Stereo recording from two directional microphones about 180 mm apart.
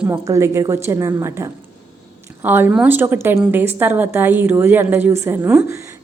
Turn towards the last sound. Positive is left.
turn(degrees=-10)  # may be behind; listen again after turning